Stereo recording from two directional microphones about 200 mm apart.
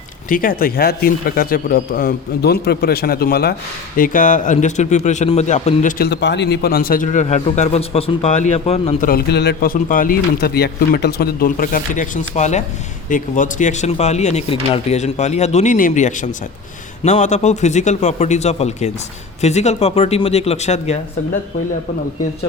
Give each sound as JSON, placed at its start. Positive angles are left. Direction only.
{"t": 0.3, "sound": "speech", "side_deg": 45}
{"t": 6.0, "sound": "speech", "side_deg": 60}
{"t": 9.0, "sound": "speech", "side_deg": 55}